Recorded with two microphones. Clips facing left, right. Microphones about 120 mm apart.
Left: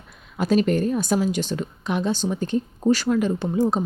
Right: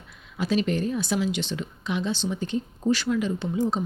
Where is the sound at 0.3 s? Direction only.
45° left (ahead or behind).